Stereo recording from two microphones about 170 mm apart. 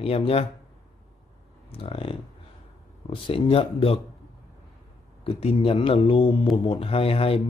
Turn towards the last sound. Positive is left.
turn(degrees=35)  # may be behind; listen again after turning